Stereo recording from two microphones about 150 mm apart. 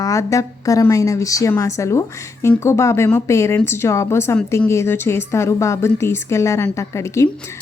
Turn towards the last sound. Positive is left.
turn(degrees=20)  # may be behind; listen again after turning